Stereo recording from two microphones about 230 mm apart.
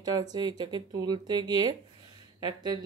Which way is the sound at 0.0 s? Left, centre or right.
Centre.